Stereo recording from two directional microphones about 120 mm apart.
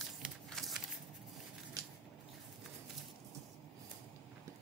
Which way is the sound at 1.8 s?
25° right (ahead or behind).